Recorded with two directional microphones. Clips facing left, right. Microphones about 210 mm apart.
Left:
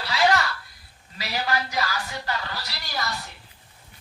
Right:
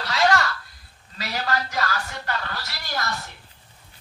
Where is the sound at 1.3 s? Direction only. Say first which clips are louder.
Even; 15° left (ahead or behind).